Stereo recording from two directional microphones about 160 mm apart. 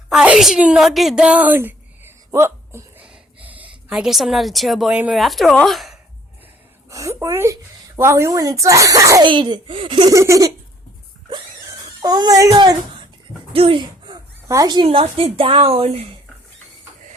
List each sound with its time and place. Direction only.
0.1 s a woman's voice: 5° right (ahead or behind)
3.1 s a sound: 10° right (ahead or behind)
3.8 s a woman's voice: 5° right (ahead or behind)
6.9 s a woman's voice: 20° right (ahead or behind)
10.2 s a woman's voice: 20° right (ahead or behind)
12.0 s a woman's voice: 25° right (ahead or behind)
13.5 s a sound: 35° right (ahead or behind)
14.4 s speech: 20° right (ahead or behind); by 16.0 s 40° right (ahead or behind)